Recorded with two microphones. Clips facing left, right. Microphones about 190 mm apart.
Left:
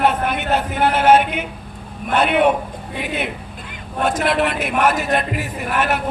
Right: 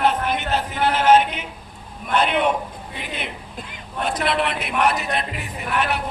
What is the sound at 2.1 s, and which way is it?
Speech, 55° left (ahead or behind).